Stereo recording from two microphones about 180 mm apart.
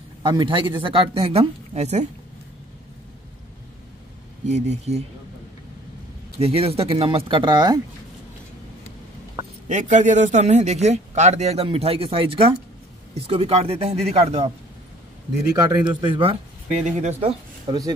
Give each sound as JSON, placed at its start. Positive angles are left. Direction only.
{"t": 0.2, "sound": "speech", "side_deg": -25}
{"t": 4.5, "sound": "a man's voice", "side_deg": -40}
{"t": 6.4, "sound": "speech", "side_deg": -35}
{"t": 9.7, "sound": "a man's voice", "side_deg": -40}
{"t": 15.5, "sound": "speech", "side_deg": -25}
{"t": 17.2, "sound": "speech", "side_deg": -30}